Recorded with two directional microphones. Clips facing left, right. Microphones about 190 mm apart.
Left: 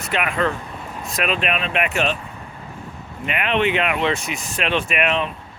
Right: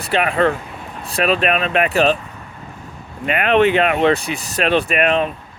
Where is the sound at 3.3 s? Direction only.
45° right (ahead or behind).